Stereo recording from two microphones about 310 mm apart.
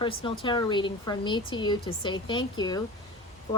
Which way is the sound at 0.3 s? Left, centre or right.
Centre.